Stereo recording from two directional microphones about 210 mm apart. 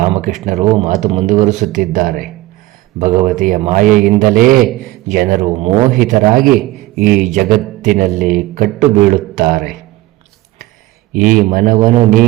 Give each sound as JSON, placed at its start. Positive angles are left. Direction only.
{"t": 0.0, "sound": "speech", "side_deg": -35}
{"t": 11.1, "sound": "a man's voice", "side_deg": -40}